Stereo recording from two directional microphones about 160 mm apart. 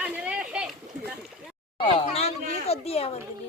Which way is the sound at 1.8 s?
40° left (ahead or behind).